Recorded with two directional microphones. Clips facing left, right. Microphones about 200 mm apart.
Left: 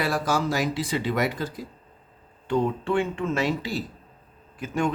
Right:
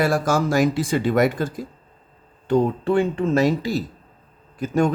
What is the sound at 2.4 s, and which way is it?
Speech, 40° right (ahead or behind).